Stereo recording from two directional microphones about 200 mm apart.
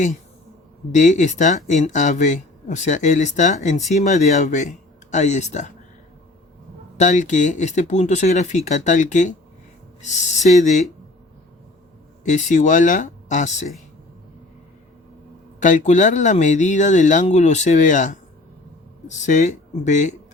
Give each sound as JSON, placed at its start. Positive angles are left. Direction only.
{"t": 0.9, "sound": "speech", "side_deg": 35}
{"t": 6.9, "sound": "speech", "side_deg": 35}
{"t": 12.2, "sound": "speech", "side_deg": 40}
{"t": 15.6, "sound": "speech", "side_deg": 40}